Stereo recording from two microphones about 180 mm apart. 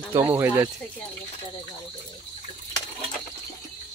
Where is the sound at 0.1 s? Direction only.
15° right (ahead or behind).